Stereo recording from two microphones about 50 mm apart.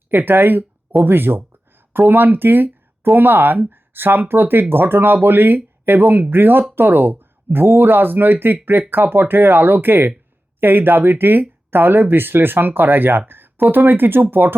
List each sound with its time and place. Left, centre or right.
0.1 s speech: right